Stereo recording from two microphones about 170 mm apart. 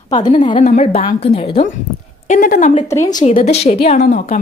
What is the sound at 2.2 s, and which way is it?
Speech, 55° left (ahead or behind).